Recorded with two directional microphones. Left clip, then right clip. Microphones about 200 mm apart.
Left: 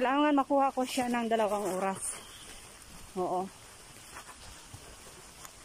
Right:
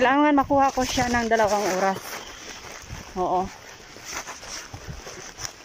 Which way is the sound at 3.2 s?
5° right (ahead or behind).